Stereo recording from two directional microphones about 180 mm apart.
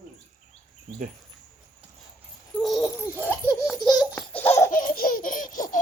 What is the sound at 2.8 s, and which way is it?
Baby laughter, 10° left (ahead or behind).